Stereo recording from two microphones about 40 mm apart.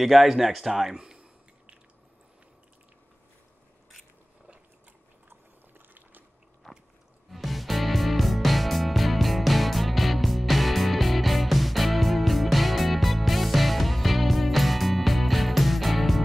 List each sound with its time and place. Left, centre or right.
0.0 s speech: centre
5.3 s a sound: right
7.2 s music: centre